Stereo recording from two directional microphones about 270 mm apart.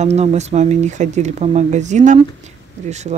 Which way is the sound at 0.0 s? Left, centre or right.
Right.